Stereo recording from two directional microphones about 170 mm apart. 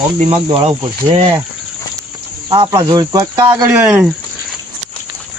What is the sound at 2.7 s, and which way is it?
Speech, 20° right (ahead or behind).